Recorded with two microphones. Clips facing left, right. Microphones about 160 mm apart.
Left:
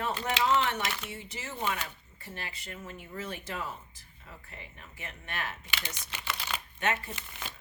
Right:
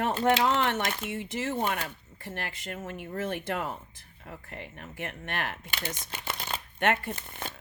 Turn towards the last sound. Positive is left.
turn(degrees=-50)  # may be behind; listen again after turning